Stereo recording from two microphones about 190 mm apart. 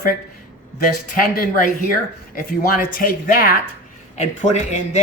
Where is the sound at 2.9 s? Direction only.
50° left (ahead or behind).